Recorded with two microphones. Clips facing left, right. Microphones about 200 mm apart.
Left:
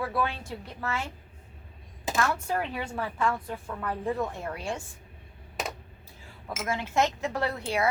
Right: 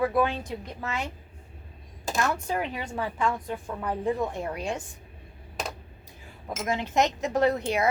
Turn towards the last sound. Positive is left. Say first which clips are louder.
# right 5 dB
turn(degrees=-20)  # may be behind; listen again after turning